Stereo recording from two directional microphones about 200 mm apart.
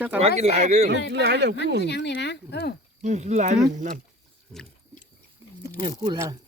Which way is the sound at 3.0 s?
35° right (ahead or behind).